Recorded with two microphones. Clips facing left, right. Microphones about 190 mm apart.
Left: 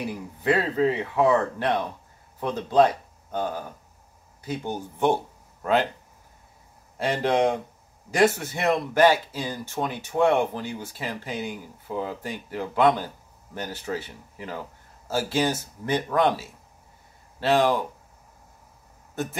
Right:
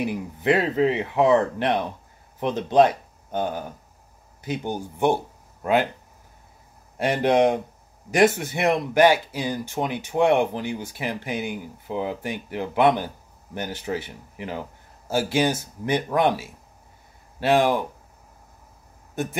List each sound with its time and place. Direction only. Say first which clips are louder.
0.0 s speech: right 3 dB; 20° right (ahead or behind)
7.0 s speech: right 3 dB; 15° right (ahead or behind)